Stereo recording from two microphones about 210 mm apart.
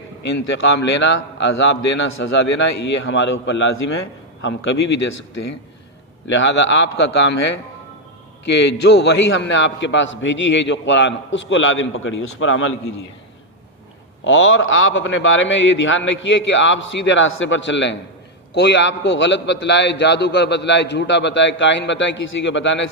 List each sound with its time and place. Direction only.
0.3 s a man's voice: 60° left (ahead or behind)
6.4 s a man's voice: 60° left (ahead or behind)
14.3 s a man's voice: 65° left (ahead or behind)